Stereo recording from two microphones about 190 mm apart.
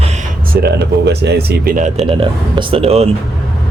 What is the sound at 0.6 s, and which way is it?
Speech, 60° right (ahead or behind).